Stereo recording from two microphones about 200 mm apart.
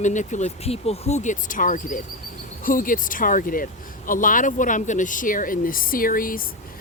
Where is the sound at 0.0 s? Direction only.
35° left (ahead or behind).